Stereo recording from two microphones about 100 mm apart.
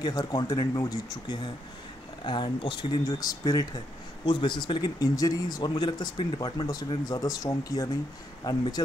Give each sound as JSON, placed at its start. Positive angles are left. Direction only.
{"t": 0.0, "sound": "speech", "side_deg": 40}
{"t": 4.3, "sound": "speech", "side_deg": 55}
{"t": 6.6, "sound": "speech", "side_deg": 40}